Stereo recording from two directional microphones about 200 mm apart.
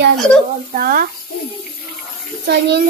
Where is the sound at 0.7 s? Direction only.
45° right (ahead or behind).